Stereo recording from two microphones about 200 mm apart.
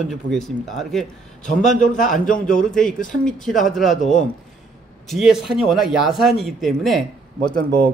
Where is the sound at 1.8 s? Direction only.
40° left (ahead or behind).